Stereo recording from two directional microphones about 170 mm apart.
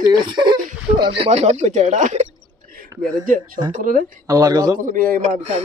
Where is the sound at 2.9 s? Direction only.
15° right (ahead or behind).